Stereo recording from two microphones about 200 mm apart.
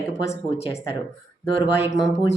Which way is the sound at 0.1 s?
30° left (ahead or behind).